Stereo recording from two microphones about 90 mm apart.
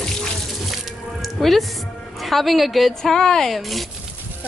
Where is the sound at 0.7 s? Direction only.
Centre (ahead or behind).